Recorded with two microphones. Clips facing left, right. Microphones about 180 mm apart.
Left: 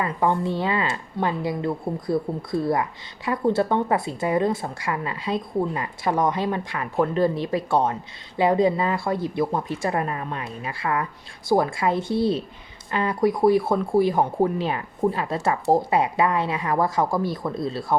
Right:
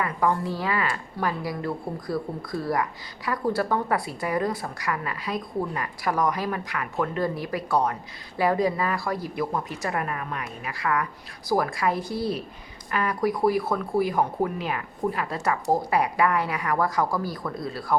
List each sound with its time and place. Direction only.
0.0 s speech: 25° left (ahead or behind)